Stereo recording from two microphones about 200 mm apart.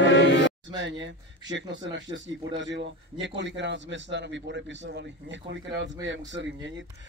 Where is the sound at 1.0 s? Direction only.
65° right (ahead or behind).